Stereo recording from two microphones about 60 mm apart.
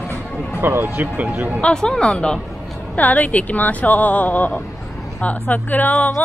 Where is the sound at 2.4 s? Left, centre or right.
Centre.